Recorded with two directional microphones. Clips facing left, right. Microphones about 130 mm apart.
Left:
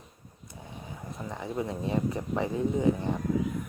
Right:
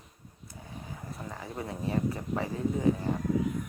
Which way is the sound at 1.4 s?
20° left (ahead or behind).